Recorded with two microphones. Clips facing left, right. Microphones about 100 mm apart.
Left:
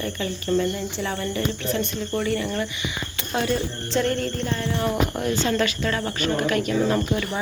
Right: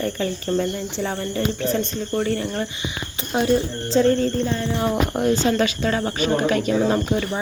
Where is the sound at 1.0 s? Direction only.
35° right (ahead or behind).